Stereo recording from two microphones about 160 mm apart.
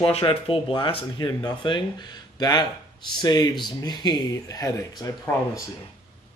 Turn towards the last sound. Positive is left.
turn(degrees=20)  # may be behind; listen again after turning